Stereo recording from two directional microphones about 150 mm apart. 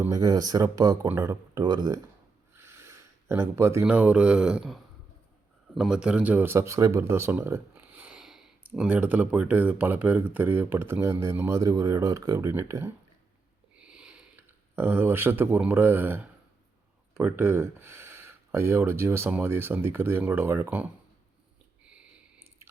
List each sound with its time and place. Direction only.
0.0 s speech: 25° right (ahead or behind)
13.7 s a sound: 5° right (ahead or behind)
17.2 s speech: 15° right (ahead or behind)